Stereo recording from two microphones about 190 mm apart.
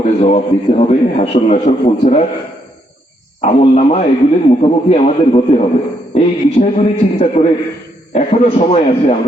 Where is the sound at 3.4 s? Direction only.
35° left (ahead or behind).